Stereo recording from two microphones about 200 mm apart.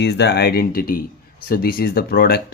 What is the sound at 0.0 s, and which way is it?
Speech, 60° left (ahead or behind).